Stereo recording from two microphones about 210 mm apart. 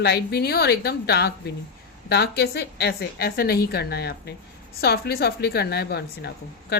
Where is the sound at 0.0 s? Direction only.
50° left (ahead or behind).